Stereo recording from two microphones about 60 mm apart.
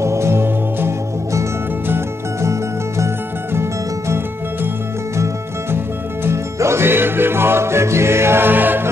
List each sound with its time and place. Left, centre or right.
0.0 s music: right
5.1 s music: right